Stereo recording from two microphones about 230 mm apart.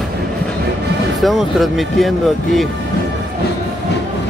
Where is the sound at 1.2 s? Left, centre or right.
Centre.